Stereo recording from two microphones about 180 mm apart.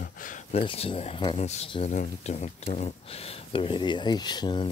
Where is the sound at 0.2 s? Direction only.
35° left (ahead or behind).